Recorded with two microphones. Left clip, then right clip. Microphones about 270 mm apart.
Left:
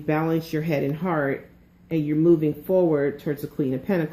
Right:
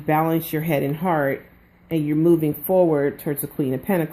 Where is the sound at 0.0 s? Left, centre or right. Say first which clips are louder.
Right 4 dB; right.